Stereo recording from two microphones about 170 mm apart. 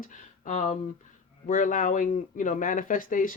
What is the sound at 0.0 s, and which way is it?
Speech, 50° left (ahead or behind).